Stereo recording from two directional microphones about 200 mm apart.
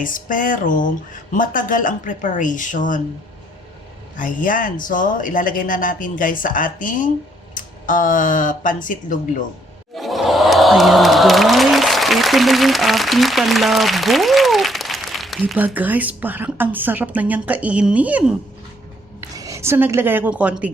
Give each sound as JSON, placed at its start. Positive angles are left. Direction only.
{"t": 0.0, "sound": "speech", "side_deg": 40}
{"t": 4.2, "sound": "speech", "side_deg": 40}
{"t": 9.9, "sound": "crowd", "side_deg": 0}
{"t": 19.4, "sound": "a woman's voice", "side_deg": -15}